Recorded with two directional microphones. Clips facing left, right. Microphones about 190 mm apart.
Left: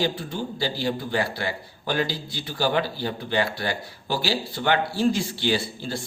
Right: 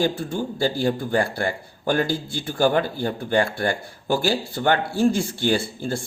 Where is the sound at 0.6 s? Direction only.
50° right (ahead or behind).